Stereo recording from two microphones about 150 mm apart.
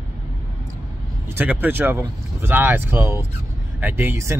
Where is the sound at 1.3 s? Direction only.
10° right (ahead or behind).